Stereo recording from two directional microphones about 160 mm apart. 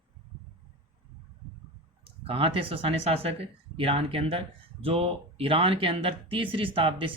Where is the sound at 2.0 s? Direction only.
35° right (ahead or behind).